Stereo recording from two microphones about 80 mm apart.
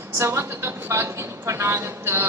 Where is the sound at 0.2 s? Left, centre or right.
Right.